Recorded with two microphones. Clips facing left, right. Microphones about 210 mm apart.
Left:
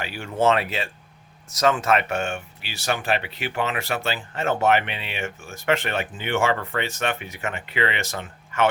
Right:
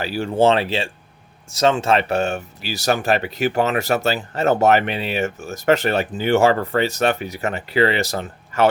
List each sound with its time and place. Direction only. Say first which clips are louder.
0.0 s speech: right 5 dB; 35° right (ahead or behind)